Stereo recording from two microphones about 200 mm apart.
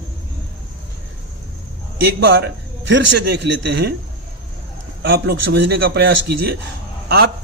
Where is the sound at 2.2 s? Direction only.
55° right (ahead or behind).